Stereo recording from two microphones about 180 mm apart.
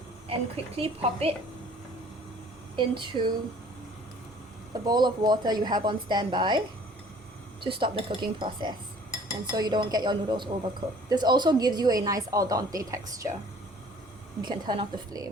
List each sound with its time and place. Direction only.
0.3 s a woman's voice: 35° right (ahead or behind)
2.7 s speech: 25° right (ahead or behind)
4.9 s speech: 25° right (ahead or behind)
7.6 s speech: 30° right (ahead or behind)
14.4 s speech: 25° right (ahead or behind)